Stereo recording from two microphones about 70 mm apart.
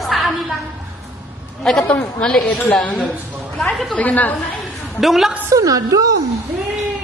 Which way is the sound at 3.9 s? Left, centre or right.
Left.